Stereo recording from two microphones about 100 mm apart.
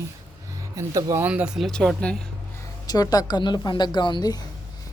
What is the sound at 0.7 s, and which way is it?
Speech, 35° right (ahead or behind).